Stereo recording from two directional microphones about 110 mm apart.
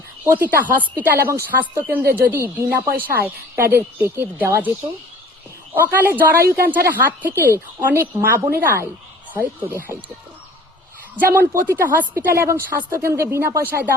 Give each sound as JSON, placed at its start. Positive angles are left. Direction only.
{"t": 0.3, "sound": "a woman's voice", "side_deg": -15}
{"t": 5.7, "sound": "a woman's voice", "side_deg": -15}
{"t": 11.3, "sound": "a woman's voice", "side_deg": -20}